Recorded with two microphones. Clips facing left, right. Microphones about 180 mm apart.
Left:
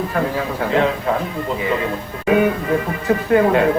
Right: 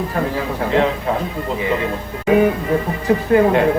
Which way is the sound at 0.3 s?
30° right (ahead or behind).